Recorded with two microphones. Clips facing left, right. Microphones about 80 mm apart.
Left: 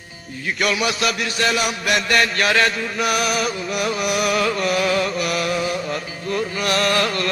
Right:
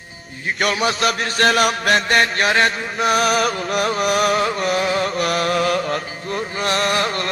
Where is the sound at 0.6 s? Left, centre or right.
Right.